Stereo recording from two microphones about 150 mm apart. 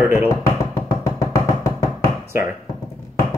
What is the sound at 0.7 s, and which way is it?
Music, 20° left (ahead or behind).